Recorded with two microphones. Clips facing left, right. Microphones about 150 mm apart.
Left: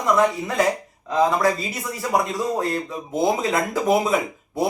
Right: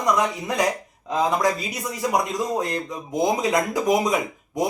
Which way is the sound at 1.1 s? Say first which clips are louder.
Left 2 dB; 20° right (ahead or behind).